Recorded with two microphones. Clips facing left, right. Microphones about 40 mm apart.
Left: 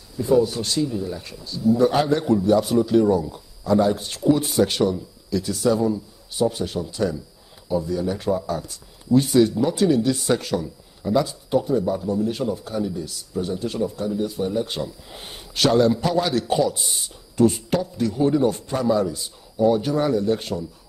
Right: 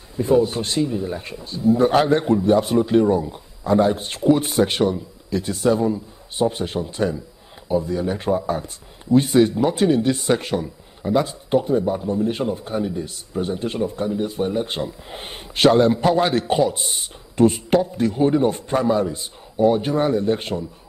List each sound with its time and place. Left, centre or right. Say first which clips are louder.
0.1 s a man's voice: right 1 dB; right